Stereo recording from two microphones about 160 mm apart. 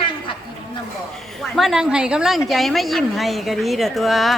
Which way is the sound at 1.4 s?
Centre (ahead or behind).